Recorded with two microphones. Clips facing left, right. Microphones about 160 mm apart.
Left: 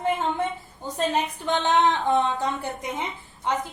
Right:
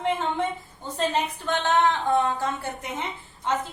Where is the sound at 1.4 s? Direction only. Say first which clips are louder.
Left 1 dB; 20° left (ahead or behind).